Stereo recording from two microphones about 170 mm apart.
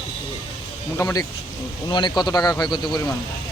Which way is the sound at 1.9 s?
25° left (ahead or behind).